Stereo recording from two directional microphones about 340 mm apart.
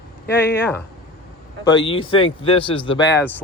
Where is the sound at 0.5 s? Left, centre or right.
Centre.